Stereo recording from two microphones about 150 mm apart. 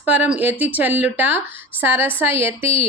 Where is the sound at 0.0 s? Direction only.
10° right (ahead or behind).